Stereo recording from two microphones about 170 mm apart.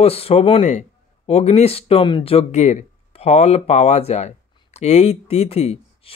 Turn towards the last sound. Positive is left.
turn(degrees=35)  # may be behind; listen again after turning